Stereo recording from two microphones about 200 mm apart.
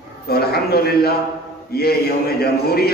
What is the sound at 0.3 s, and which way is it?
A man's voice, 50° left (ahead or behind).